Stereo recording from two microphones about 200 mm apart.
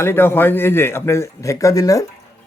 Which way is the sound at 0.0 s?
10° left (ahead or behind).